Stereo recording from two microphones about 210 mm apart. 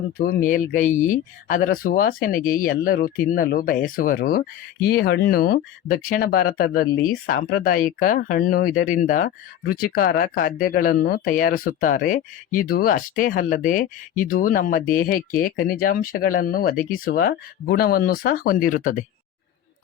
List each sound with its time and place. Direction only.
0.2 s speech: 45° left (ahead or behind)